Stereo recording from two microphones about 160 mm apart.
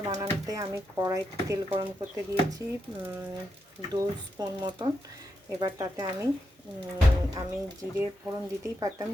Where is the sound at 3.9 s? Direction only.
25° right (ahead or behind).